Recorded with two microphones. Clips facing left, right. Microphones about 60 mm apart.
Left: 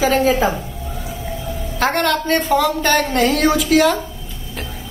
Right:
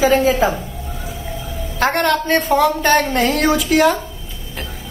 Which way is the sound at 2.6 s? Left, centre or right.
Right.